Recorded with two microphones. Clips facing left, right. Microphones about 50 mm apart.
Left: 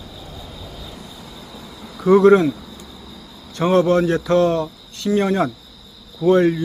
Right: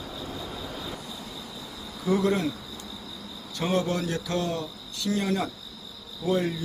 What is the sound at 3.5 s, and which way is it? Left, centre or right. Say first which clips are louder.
Speech: left 11 dB; left.